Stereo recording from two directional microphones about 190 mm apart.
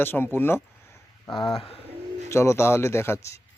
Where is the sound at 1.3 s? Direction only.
25° left (ahead or behind).